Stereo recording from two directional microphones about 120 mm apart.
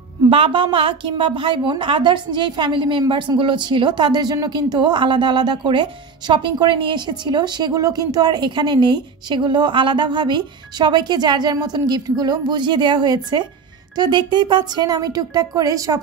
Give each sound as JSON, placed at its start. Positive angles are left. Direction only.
{"t": 0.3, "sound": "a woman's voice", "side_deg": -45}